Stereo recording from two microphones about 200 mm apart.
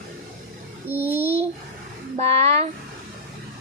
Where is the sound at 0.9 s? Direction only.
10° right (ahead or behind).